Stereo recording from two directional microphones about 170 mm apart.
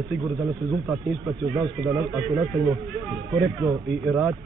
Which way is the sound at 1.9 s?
Centre (ahead or behind).